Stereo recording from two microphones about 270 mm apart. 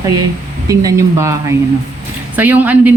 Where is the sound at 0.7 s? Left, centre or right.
Centre.